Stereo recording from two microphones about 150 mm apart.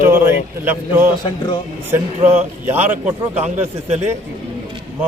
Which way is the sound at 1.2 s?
30° left (ahead or behind).